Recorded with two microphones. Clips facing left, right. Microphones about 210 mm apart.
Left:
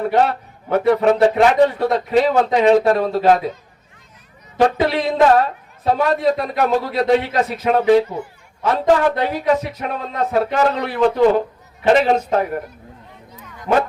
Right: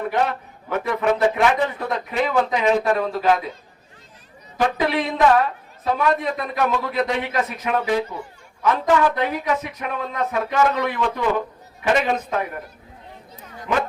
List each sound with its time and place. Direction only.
0.1 s speech: 35° left (ahead or behind)
4.6 s speech: 35° left (ahead or behind)